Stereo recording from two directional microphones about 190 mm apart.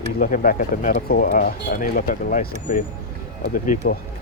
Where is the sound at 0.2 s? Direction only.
45° left (ahead or behind).